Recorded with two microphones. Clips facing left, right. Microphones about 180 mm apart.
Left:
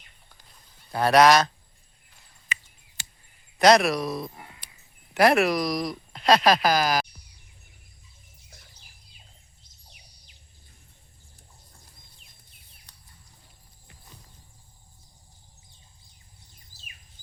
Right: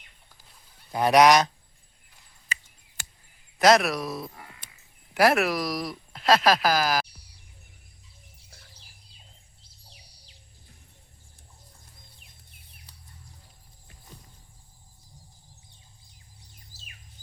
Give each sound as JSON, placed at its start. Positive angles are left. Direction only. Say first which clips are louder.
{"t": 0.9, "sound": "speech", "louder": "even", "side_deg": -15}
{"t": 3.6, "sound": "speech", "louder": "left 2 dB", "side_deg": 0}
{"t": 9.8, "sound": "a sound", "louder": "right 2 dB", "side_deg": -30}